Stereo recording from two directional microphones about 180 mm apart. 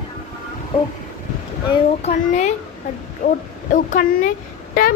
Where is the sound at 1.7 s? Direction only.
40° left (ahead or behind).